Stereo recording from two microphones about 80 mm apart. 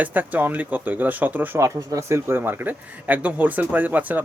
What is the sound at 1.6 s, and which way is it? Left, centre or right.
Speech, right.